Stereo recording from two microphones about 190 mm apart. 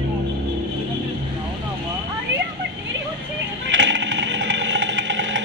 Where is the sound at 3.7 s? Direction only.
75° right (ahead or behind).